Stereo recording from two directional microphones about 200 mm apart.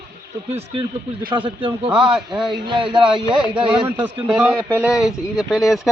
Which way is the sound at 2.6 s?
25° right (ahead or behind).